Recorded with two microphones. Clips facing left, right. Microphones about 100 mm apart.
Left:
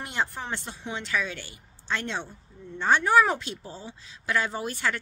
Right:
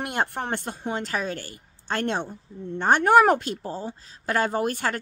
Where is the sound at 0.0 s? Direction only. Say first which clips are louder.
Right 4 dB; 55° right (ahead or behind).